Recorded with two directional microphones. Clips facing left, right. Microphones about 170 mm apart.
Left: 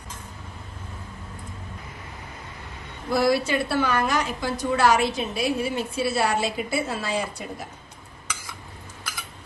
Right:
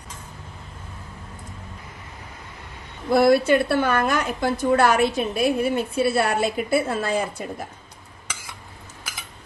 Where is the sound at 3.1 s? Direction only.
55° right (ahead or behind).